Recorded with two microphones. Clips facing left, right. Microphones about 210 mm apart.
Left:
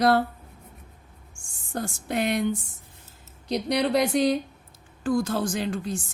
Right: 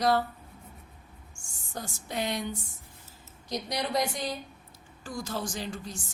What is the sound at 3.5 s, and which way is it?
Speech, 65° left (ahead or behind).